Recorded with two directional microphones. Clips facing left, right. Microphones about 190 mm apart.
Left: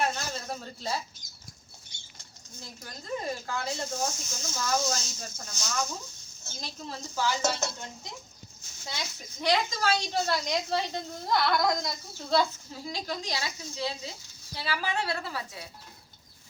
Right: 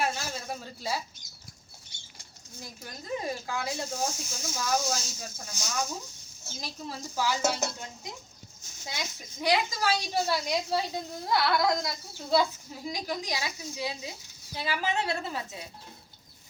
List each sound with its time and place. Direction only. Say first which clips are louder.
0.0 s a sound: left 1 dB; 10° right (ahead or behind)
2.6 s a woman's voice: right 1 dB; 10° right (ahead or behind)
9.4 s a woman's voice: even; 10° right (ahead or behind)